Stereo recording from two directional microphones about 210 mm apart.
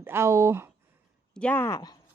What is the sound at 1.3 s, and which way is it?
Speech, 5° left (ahead or behind).